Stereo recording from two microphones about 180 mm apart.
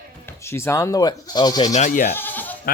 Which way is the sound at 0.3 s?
15° left (ahead or behind).